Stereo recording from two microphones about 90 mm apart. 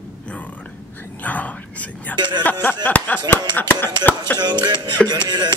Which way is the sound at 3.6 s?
20° left (ahead or behind).